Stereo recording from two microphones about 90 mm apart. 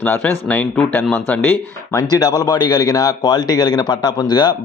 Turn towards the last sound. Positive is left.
turn(degrees=50)  # may be behind; listen again after turning